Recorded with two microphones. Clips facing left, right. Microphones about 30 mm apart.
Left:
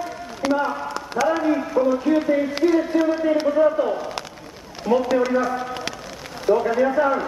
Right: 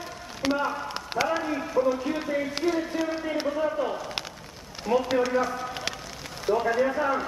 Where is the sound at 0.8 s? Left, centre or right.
Right.